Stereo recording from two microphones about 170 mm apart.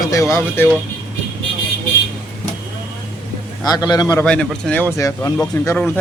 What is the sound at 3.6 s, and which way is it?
Speech, 20° left (ahead or behind).